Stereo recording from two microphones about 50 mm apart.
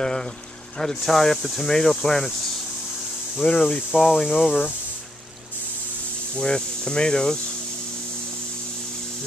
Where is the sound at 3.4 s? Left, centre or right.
Centre.